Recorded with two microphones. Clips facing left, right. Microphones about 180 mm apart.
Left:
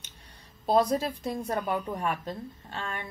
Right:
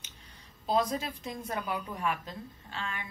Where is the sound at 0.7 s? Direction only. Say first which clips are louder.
Left 5 dB; 40° left (ahead or behind).